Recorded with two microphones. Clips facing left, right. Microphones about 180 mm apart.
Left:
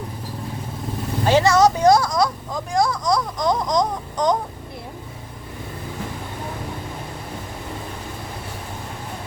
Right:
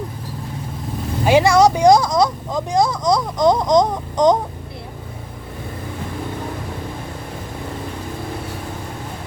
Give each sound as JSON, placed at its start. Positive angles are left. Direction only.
{"t": 1.2, "sound": "speech", "side_deg": -10}